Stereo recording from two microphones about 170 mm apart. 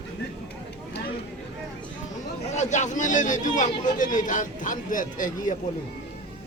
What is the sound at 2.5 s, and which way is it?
Speech, 45° left (ahead or behind).